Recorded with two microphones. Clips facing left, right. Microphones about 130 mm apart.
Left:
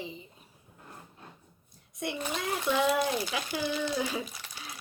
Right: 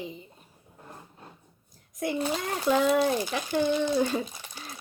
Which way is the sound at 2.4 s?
Centre (ahead or behind).